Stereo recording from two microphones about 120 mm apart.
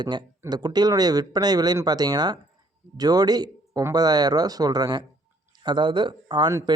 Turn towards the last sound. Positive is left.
turn(degrees=-35)  # may be behind; listen again after turning